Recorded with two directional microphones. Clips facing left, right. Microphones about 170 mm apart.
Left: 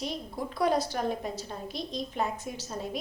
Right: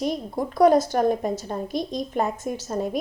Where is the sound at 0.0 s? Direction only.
50° right (ahead or behind).